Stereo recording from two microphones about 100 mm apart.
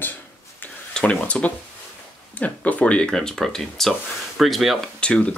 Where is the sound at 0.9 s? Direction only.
10° left (ahead or behind).